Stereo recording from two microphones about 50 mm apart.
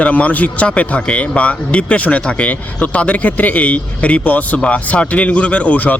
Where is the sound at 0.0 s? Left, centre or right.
Left.